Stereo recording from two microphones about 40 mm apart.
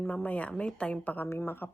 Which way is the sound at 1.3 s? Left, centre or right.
Left.